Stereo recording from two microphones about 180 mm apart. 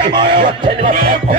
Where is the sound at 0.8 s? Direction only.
40° right (ahead or behind).